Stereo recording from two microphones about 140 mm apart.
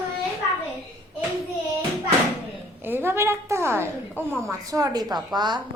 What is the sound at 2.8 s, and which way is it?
A woman's voice, 15° right (ahead or behind).